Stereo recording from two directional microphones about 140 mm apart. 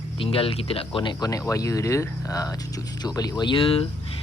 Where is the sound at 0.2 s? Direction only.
40° left (ahead or behind).